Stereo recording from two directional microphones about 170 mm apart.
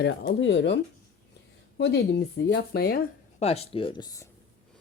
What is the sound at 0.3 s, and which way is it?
Speech, 90° left.